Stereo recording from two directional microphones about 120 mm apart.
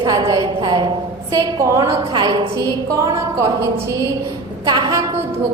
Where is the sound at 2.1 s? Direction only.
40° right (ahead or behind).